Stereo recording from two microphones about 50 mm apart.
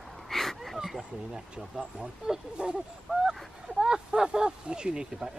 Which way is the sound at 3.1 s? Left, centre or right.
Centre.